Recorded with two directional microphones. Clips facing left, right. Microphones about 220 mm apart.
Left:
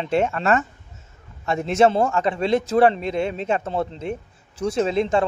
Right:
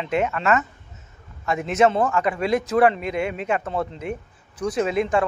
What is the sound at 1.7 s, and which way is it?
A man's voice, 30° left (ahead or behind).